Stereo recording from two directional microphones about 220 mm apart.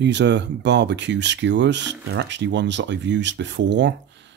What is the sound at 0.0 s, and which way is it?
Speech, 50° right (ahead or behind).